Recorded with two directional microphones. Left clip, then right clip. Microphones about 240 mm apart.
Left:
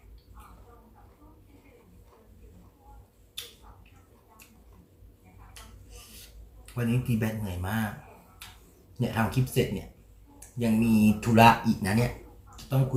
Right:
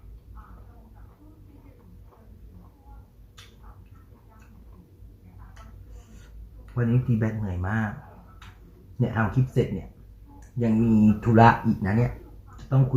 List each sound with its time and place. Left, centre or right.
6.7 s speech: left
9.0 s speech: left